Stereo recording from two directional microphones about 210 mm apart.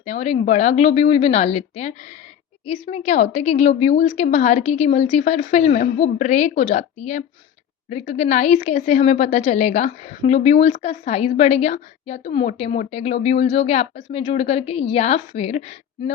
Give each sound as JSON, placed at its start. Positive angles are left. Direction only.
{"t": 0.0, "sound": "a woman's voice", "side_deg": 30}